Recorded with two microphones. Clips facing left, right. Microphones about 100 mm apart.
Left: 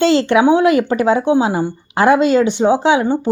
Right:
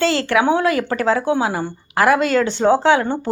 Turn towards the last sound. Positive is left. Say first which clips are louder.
# left 2 dB
turn(degrees=15)  # may be behind; listen again after turning